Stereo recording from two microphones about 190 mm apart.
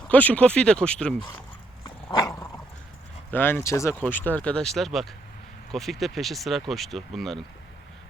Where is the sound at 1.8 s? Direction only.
15° left (ahead or behind).